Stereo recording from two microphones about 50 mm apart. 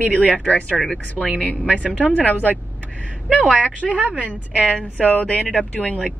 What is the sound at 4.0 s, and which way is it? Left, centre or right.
Speech, right.